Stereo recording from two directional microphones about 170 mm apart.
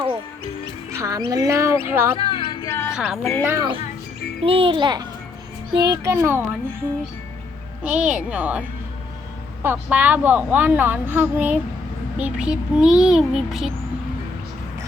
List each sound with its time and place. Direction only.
0.9 s a woman's voice: 20° right (ahead or behind)
2.1 s music: 30° left (ahead or behind)
2.9 s speech: centre (ahead or behind)
3.4 s a woman's voice: 15° right (ahead or behind)
4.4 s a child's voice: 30° right (ahead or behind); by 6.4 s 15° right (ahead or behind)
7.9 s a woman's voice: 5° right (ahead or behind)
9.6 s a woman's voice: 10° right (ahead or behind)